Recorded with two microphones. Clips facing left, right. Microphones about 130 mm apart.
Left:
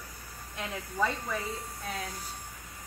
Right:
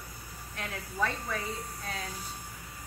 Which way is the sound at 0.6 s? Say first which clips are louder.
Left 2 dB; 15° left (ahead or behind).